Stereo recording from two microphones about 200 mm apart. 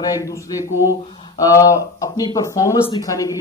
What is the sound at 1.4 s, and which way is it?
Speech, 15° left (ahead or behind).